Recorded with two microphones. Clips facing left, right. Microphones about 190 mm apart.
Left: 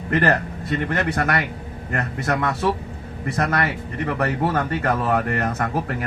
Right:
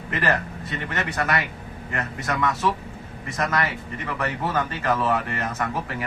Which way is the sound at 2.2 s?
60° left (ahead or behind).